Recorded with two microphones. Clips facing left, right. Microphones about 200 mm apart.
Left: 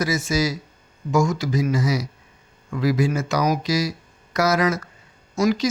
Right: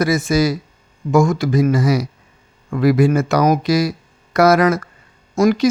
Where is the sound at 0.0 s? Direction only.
55° right (ahead or behind).